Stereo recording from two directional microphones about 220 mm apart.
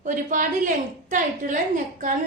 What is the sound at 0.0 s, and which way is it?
A woman's voice, 35° right (ahead or behind).